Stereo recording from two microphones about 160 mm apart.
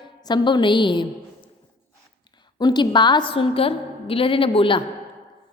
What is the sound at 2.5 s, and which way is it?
A woman's voice, 25° left (ahead or behind).